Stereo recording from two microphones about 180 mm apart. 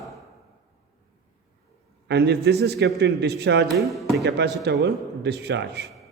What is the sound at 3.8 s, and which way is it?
Speech, centre (ahead or behind).